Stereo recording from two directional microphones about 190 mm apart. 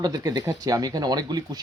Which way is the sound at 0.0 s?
20° right (ahead or behind).